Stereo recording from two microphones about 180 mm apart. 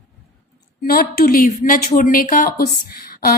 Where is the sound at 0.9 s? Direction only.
55° left (ahead or behind).